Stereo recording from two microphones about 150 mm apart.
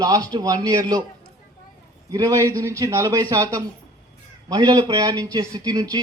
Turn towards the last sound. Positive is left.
turn(degrees=-25)  # may be behind; listen again after turning